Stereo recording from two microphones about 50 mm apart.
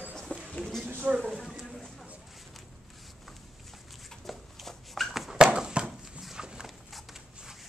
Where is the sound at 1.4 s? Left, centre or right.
Centre.